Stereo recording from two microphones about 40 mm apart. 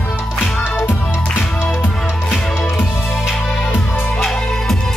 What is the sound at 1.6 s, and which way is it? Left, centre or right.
Music, left.